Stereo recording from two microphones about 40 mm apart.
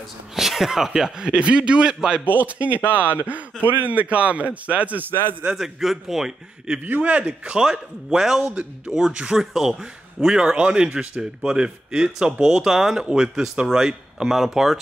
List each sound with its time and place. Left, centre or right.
0.4 s speech: centre
2.2 s a man's voice: right
5.6 s speech: centre
7.0 s speech: right
7.4 s speech: right
8.2 s speech: centre